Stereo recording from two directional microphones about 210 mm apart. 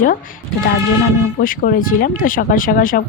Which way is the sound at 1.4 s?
40° left (ahead or behind).